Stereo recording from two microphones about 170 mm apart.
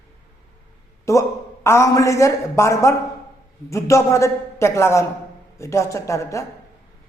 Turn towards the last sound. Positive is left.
turn(degrees=20)  # may be behind; listen again after turning